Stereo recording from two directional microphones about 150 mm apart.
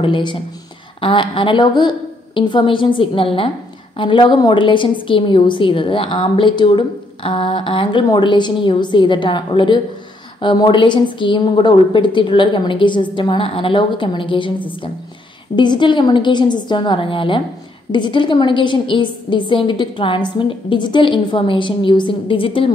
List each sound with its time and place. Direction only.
0.0 s a woman's voice: 30° left (ahead or behind)
15.5 s a woman's voice: 30° left (ahead or behind)